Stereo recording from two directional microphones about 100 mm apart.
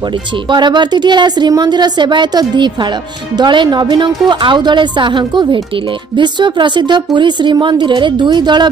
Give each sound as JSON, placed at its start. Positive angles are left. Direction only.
{"t": 0.5, "sound": "a woman's voice", "side_deg": -50}